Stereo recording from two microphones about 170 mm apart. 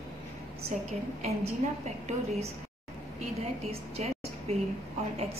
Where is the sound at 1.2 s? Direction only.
40° right (ahead or behind).